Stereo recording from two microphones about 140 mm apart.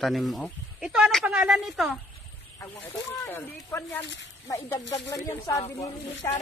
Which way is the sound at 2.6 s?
15° left (ahead or behind).